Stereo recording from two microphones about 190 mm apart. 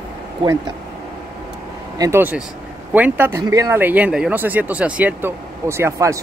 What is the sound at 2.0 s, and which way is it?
Speech, 10° right (ahead or behind).